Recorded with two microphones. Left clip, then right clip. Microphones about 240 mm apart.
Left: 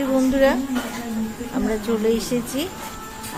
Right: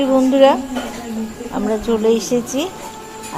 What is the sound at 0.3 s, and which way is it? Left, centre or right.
A woman's voice, centre.